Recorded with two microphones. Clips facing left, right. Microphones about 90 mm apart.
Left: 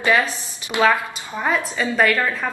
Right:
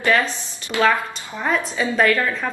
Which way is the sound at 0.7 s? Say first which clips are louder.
Left 1 dB; 20° left (ahead or behind).